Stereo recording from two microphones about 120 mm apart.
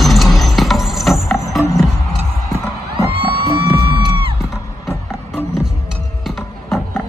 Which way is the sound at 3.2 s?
45° right (ahead or behind).